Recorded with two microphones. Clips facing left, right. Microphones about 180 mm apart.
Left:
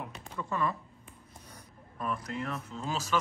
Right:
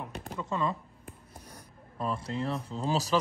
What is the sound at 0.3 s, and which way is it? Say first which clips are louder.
Speech: right 1 dB; 20° right (ahead or behind).